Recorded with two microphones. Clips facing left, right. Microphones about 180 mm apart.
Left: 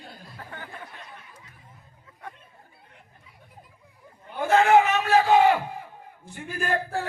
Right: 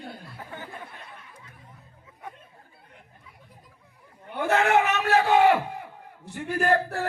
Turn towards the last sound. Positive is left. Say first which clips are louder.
# right 4 dB
turn(degrees=-70)  # may be behind; listen again after turning